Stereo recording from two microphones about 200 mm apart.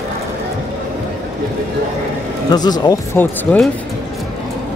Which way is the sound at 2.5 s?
20° left (ahead or behind).